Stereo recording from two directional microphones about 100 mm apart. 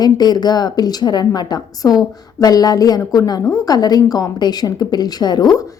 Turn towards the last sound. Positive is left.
turn(degrees=40)  # may be behind; listen again after turning